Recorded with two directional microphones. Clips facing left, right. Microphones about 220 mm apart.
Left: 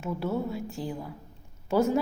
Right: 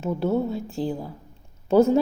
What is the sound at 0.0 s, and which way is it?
A woman's voice, 25° right (ahead or behind).